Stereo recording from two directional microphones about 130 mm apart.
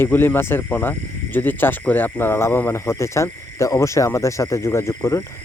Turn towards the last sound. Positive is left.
turn(degrees=25)  # may be behind; listen again after turning